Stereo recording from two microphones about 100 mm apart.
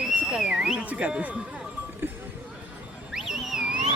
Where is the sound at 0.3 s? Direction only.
5° right (ahead or behind).